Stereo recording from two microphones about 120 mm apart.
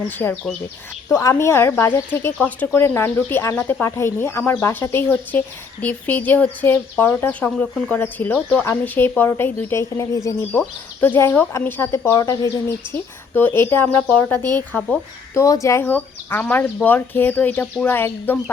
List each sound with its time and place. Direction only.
0.2 s speech: 15° left (ahead or behind)